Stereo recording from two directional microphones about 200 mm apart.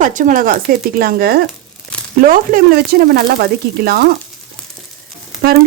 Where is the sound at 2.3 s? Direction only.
45° right (ahead or behind).